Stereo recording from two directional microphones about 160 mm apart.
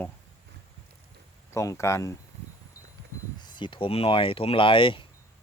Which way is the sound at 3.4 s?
30° left (ahead or behind).